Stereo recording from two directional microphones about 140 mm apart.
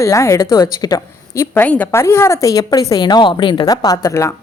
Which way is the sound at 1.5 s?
10° left (ahead or behind).